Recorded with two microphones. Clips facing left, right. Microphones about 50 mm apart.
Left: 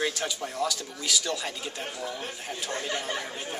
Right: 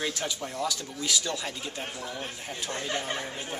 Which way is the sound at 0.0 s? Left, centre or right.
Centre.